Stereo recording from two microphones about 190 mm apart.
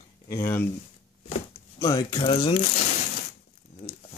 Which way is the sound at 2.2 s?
30° left (ahead or behind).